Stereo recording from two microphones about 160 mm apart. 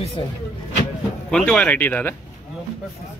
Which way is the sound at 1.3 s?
5° left (ahead or behind).